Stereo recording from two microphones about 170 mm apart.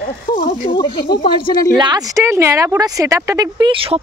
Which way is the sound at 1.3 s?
25° left (ahead or behind).